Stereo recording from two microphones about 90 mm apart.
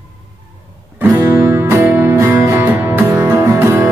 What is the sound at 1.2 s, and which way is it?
Music, 35° right (ahead or behind).